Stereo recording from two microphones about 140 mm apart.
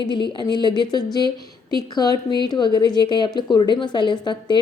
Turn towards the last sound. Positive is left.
turn(degrees=30)  # may be behind; listen again after turning